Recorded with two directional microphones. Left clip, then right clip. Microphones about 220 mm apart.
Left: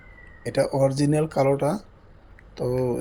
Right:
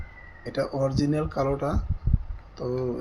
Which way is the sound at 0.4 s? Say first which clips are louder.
Left 5 dB; 35° left (ahead or behind).